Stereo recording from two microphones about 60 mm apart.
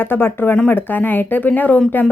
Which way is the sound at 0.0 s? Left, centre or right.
Left.